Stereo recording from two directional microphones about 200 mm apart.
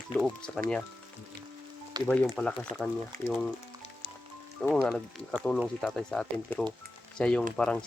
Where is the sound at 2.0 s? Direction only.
5° left (ahead or behind).